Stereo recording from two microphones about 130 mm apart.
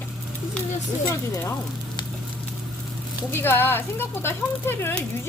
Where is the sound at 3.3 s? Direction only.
15° left (ahead or behind).